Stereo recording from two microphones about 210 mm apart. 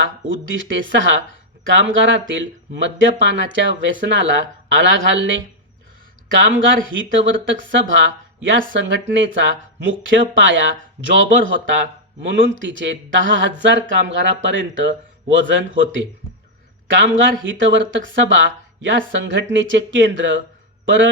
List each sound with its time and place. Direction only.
0.0 s speech: 65° right (ahead or behind)
17.4 s a man's voice: 65° right (ahead or behind)